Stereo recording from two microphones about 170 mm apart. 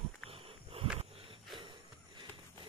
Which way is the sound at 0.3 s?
35° right (ahead or behind).